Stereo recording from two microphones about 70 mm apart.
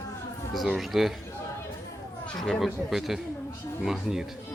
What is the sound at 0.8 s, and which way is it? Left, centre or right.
Speech, centre.